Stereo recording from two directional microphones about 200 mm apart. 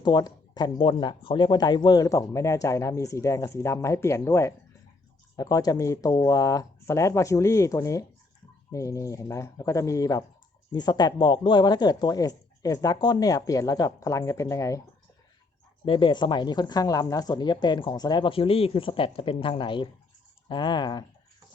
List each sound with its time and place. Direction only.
0.0 s speech: 20° left (ahead or behind)
15.9 s speech: 25° left (ahead or behind)